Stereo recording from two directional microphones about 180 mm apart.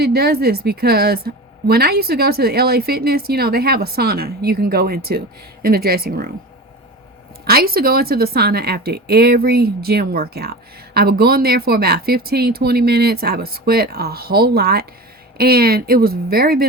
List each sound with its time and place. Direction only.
0.0 s a woman's voice: 60° right (ahead or behind)
7.4 s a woman's voice: 55° right (ahead or behind)